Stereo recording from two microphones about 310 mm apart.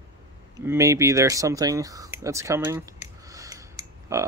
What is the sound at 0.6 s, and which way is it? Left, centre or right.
Speech, centre.